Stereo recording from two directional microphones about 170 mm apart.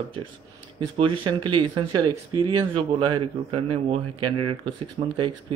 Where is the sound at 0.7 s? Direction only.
30° right (ahead or behind).